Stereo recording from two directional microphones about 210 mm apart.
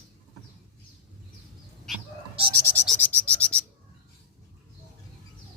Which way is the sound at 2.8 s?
5° left (ahead or behind).